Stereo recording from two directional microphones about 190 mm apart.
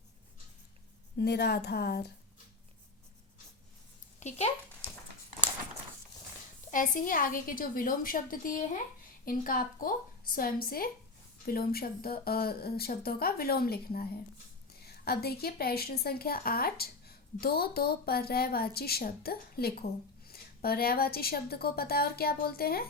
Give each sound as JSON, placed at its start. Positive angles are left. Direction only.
{"t": 1.2, "sound": "a woman's voice", "side_deg": 55}
{"t": 4.2, "sound": "speech", "side_deg": 35}
{"t": 6.7, "sound": "a woman's voice", "side_deg": 45}